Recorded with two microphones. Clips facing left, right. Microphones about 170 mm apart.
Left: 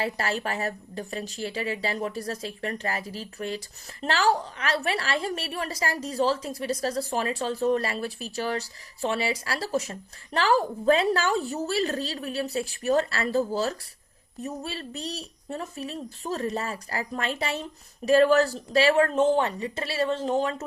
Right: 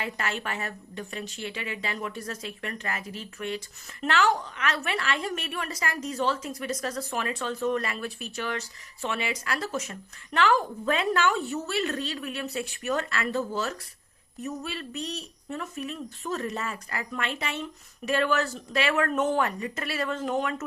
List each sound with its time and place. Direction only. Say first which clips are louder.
0.0 s a woman's voice: left 4 dB; 35° left (ahead or behind)